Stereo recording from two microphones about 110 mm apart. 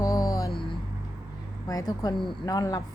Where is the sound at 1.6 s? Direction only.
35° left (ahead or behind).